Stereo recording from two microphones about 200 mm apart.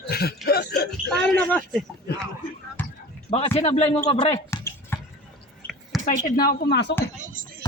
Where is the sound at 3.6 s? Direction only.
30° left (ahead or behind).